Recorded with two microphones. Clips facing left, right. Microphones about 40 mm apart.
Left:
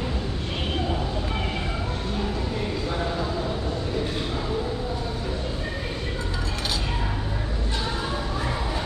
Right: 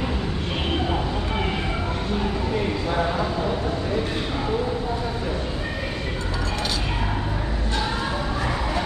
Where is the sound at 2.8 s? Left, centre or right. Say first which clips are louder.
Right 4 dB; right.